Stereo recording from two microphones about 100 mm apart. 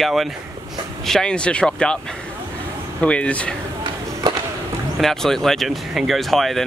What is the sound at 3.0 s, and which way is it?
Speech, 10° left (ahead or behind).